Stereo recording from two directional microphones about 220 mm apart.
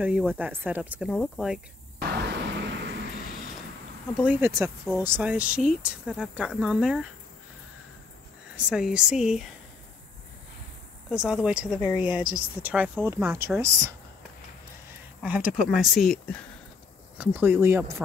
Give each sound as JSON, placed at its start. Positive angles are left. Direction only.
{"t": 0.0, "sound": "speech", "side_deg": -5}
{"t": 1.1, "sound": "speech", "side_deg": 5}
{"t": 2.0, "sound": "vehicle", "side_deg": -50}
{"t": 4.2, "sound": "speech", "side_deg": -10}
{"t": 8.5, "sound": "speech", "side_deg": -5}
{"t": 11.1, "sound": "speech", "side_deg": -5}
{"t": 15.2, "sound": "speech", "side_deg": -5}
{"t": 17.2, "sound": "speech", "side_deg": -10}